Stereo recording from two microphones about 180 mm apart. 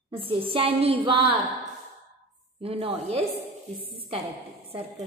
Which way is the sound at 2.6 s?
30° right (ahead or behind).